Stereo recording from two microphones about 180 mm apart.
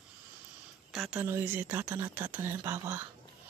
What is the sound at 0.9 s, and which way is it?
Speech, 5° right (ahead or behind).